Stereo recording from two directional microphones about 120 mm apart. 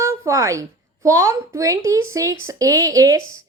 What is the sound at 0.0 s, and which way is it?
Speech, 25° right (ahead or behind).